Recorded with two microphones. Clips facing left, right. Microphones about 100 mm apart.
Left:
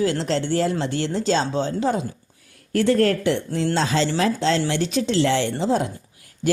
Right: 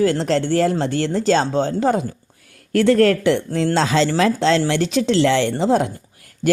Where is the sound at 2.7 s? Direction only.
90° right.